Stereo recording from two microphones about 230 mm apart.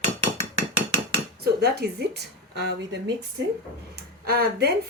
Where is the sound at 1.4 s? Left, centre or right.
Right.